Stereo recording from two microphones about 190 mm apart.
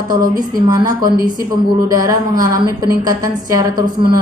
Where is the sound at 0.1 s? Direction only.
20° right (ahead or behind).